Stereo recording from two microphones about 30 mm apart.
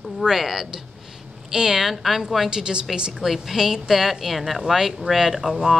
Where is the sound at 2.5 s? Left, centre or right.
Right.